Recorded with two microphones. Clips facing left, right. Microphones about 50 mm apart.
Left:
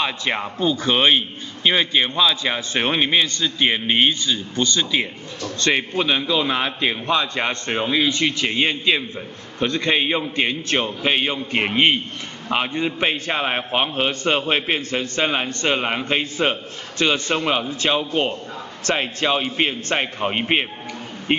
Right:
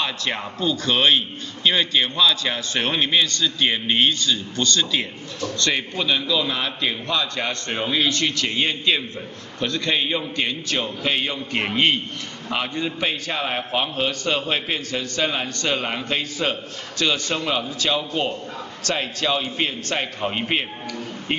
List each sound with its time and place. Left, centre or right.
0.0 s a man's voice: left
7.7 s a man's voice: centre
9.6 s a man's voice: left